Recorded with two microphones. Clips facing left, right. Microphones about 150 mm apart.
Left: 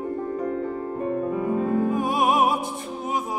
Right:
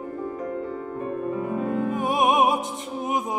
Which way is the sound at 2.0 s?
20° right (ahead or behind).